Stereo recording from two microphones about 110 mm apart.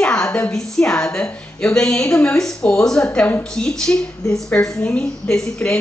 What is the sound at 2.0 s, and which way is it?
Speech, 25° left (ahead or behind).